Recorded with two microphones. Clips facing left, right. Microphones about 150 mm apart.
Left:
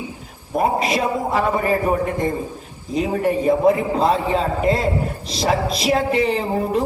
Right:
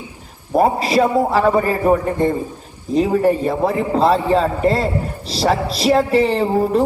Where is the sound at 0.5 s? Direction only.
30° right (ahead or behind).